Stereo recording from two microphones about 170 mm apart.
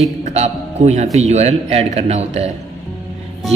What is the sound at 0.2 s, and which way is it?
A man's voice, 40° right (ahead or behind).